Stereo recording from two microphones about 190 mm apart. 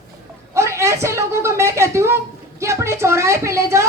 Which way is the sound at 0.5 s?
15° right (ahead or behind).